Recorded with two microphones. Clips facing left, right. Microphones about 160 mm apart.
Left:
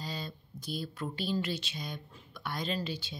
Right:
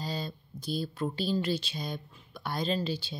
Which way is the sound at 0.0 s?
35° right (ahead or behind).